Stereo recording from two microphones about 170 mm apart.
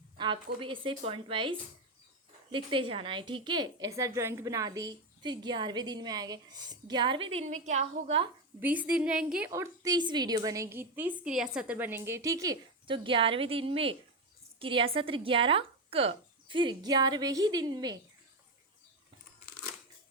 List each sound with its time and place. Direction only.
0.2 s a sound: 25° right (ahead or behind)
0.6 s a woman's voice: 30° right (ahead or behind)
8.6 s a woman's voice: 10° right (ahead or behind)
9.5 s a woman's voice: 20° right (ahead or behind)